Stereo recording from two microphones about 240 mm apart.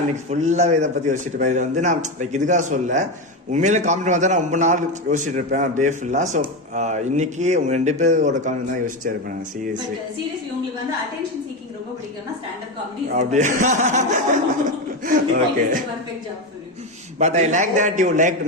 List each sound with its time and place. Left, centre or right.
0.3 s a man's voice: right
13.1 s a man's voice: right
17.2 s a man's voice: right